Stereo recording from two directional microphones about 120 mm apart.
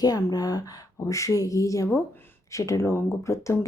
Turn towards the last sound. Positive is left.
turn(degrees=25)  # may be behind; listen again after turning